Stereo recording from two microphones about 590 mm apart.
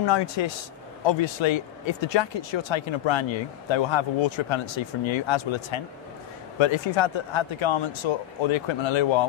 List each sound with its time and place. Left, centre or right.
0.0 s speech: left